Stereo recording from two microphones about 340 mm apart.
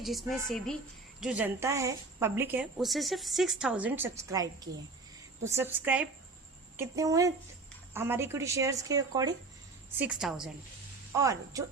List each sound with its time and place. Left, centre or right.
0.0 s a woman's voice: centre